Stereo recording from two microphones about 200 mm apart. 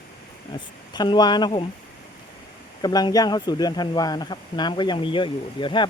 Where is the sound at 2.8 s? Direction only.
20° left (ahead or behind).